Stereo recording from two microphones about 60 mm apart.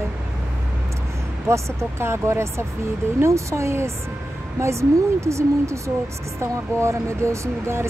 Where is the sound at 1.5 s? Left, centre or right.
Right.